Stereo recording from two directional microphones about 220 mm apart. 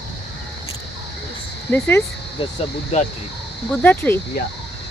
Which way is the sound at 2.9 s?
30° left (ahead or behind).